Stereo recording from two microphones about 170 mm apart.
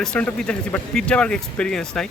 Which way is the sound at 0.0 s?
5° left (ahead or behind).